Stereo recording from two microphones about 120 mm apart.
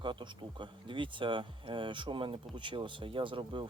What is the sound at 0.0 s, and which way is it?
Speech, 40° right (ahead or behind).